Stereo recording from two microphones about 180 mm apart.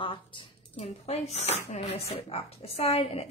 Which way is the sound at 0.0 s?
30° left (ahead or behind).